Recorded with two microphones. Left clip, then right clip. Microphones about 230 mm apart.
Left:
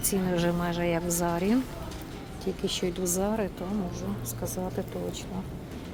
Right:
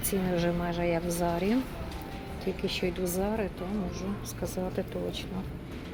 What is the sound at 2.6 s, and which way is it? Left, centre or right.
A woman's voice, left.